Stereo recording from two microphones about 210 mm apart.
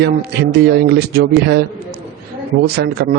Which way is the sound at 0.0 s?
50° right (ahead or behind).